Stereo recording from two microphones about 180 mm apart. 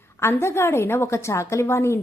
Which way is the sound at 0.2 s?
15° left (ahead or behind).